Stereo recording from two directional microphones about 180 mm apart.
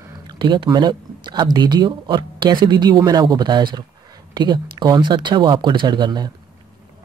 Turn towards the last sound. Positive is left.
turn(degrees=-25)  # may be behind; listen again after turning